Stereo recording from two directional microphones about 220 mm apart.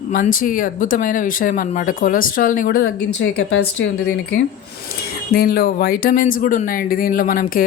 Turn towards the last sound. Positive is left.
turn(degrees=40)  # may be behind; listen again after turning